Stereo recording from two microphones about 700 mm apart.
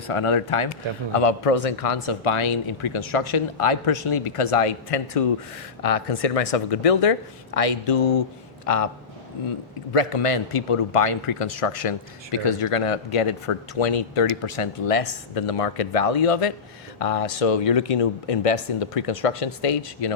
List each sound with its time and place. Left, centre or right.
0.1 s speech: left
9.9 s speech: left